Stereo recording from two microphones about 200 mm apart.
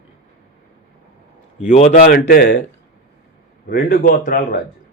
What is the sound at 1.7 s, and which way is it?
Speech, 35° left (ahead or behind).